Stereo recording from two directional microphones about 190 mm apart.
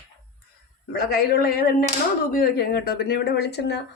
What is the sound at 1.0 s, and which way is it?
Speech, 55° left (ahead or behind).